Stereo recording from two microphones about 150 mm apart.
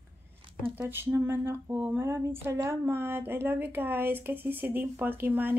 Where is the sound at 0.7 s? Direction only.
15° right (ahead or behind).